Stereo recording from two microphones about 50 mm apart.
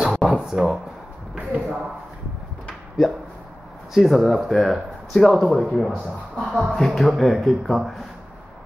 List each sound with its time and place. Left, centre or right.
0.0 s a sound: centre
1.3 s speech: right
3.9 s speech: centre